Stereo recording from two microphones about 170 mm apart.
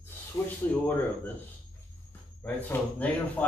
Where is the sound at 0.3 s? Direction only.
20° left (ahead or behind).